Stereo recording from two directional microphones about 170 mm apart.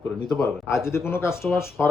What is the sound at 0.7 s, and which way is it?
Speech, 15° left (ahead or behind).